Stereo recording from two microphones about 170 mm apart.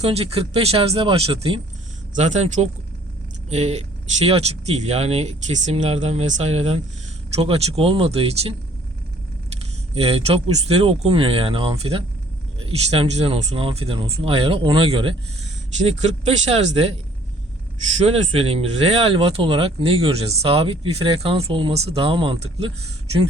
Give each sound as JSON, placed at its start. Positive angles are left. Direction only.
{"t": 0.0, "sound": "speech", "side_deg": -35}
{"t": 2.1, "sound": "speech", "side_deg": -45}
{"t": 9.9, "sound": "speech", "side_deg": -35}
{"t": 18.0, "sound": "speech", "side_deg": -35}